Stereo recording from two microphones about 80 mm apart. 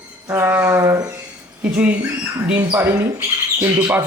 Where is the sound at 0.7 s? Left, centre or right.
Right.